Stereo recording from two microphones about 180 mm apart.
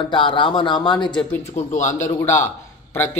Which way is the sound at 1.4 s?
40° left (ahead or behind).